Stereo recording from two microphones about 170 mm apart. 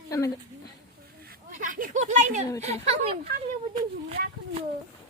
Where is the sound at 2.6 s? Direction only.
40° right (ahead or behind).